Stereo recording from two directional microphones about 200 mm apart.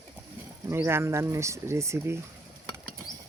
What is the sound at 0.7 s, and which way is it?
Speech, 10° right (ahead or behind).